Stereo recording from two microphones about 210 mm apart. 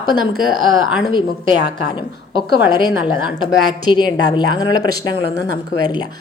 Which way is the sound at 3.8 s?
20° left (ahead or behind).